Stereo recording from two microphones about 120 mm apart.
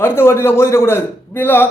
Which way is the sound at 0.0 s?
20° left (ahead or behind).